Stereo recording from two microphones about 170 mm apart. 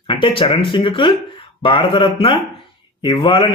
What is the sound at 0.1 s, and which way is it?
Speech, 30° left (ahead or behind).